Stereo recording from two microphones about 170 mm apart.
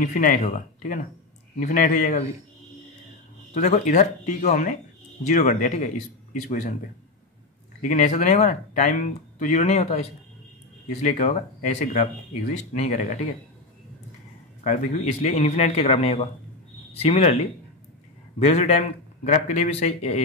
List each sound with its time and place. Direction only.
0.0 s speech: 50° left (ahead or behind)
3.5 s speech: 45° left (ahead or behind)
7.8 s speech: 45° left (ahead or behind)
14.6 s a man's voice: 45° left (ahead or behind)
18.4 s a man's voice: 40° left (ahead or behind)